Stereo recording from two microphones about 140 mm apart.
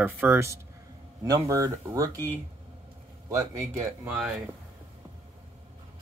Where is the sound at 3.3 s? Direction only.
20° right (ahead or behind).